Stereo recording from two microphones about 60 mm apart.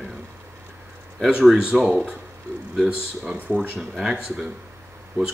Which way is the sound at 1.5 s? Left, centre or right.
Centre.